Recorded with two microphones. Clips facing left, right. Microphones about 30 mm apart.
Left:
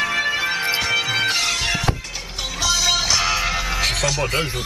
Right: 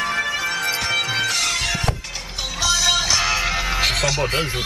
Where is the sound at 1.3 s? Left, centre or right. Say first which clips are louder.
Left 1 dB; left.